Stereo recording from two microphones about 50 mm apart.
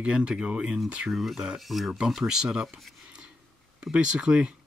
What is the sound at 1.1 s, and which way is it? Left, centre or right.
Speech, centre.